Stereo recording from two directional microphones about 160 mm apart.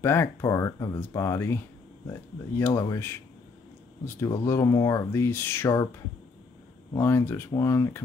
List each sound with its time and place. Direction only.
0.0 s speech: 15° left (ahead or behind)
4.5 s speech: 20° left (ahead or behind)
7.0 s speech: 15° left (ahead or behind)